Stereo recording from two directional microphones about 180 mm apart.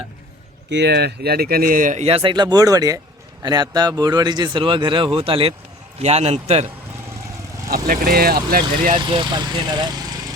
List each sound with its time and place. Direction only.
0.7 s a man's voice: 70° right (ahead or behind); by 6.7 s 35° right (ahead or behind)
7.7 s speech: 55° right (ahead or behind)
9.0 s speech: 25° right (ahead or behind)